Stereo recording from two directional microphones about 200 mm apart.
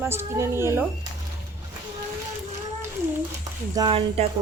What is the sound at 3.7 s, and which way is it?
Speech, 20° right (ahead or behind).